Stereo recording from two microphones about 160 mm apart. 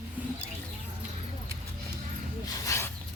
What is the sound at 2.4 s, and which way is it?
Snake, 20° left (ahead or behind).